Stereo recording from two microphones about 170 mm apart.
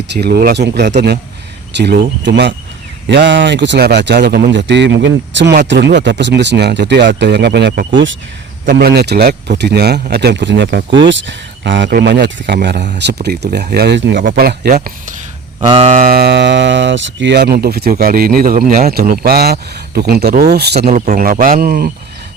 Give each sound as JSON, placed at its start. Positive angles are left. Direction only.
{"t": 0.1, "sound": "speech", "side_deg": -70}
{"t": 1.7, "sound": "speech", "side_deg": -85}
{"t": 4.2, "sound": "speech", "side_deg": -65}
{"t": 8.6, "sound": "speech", "side_deg": -65}
{"t": 13.2, "sound": "speech", "side_deg": -75}
{"t": 14.2, "sound": "speech", "side_deg": -60}
{"t": 15.6, "sound": "a sound", "side_deg": -30}
{"t": 16.1, "sound": "speech", "side_deg": -75}
{"t": 20.9, "sound": "speech", "side_deg": -45}